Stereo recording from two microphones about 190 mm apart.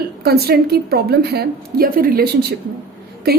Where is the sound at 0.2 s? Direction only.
55° right (ahead or behind).